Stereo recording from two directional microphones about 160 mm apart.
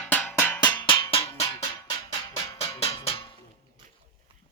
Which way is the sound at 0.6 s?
30° left (ahead or behind).